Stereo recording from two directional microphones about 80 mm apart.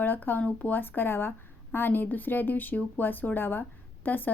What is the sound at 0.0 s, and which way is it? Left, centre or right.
Speech, left.